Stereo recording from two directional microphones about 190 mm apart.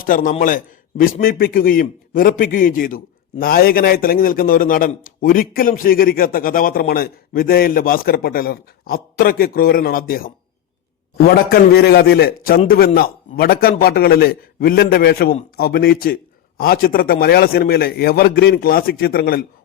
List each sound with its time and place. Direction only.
0.1 s a man's voice: 45° left (ahead or behind)